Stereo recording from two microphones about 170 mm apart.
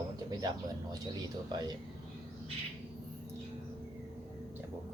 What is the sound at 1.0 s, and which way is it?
Speech, 25° right (ahead or behind).